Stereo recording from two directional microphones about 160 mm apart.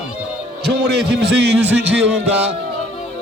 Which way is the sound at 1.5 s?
10° right (ahead or behind).